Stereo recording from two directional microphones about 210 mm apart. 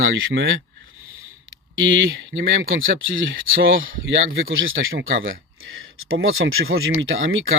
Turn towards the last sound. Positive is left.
turn(degrees=-70)  # may be behind; listen again after turning